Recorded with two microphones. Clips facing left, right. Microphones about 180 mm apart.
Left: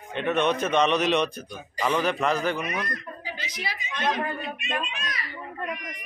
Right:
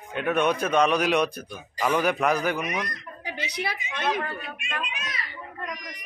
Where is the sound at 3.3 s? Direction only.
65° right (ahead or behind).